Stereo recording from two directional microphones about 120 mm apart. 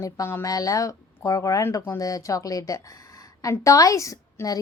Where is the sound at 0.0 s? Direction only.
20° left (ahead or behind).